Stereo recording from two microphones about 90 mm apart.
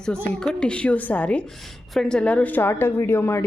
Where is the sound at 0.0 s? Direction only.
10° left (ahead or behind).